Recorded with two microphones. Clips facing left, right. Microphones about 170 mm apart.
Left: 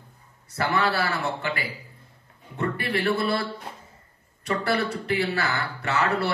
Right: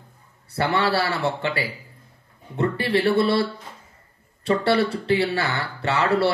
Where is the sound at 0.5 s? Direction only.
30° right (ahead or behind).